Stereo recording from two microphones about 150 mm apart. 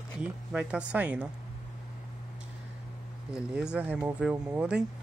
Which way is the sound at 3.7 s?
10° right (ahead or behind).